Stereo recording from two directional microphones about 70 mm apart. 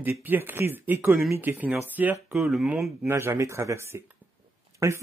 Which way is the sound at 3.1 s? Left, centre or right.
Right.